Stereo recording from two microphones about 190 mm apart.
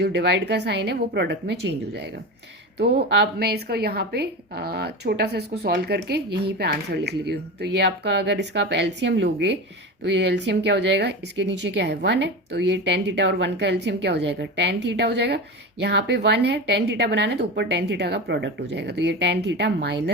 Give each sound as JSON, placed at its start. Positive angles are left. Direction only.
{"t": 0.0, "sound": "a woman's voice", "side_deg": -60}